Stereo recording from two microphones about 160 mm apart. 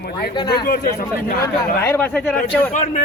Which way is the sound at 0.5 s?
75° left (ahead or behind).